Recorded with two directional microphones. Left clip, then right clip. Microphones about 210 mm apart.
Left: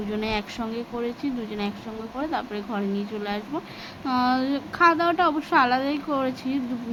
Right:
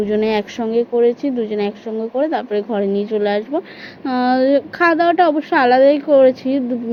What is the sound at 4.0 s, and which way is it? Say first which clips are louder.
Speech: right 6 dB; 45° left (ahead or behind).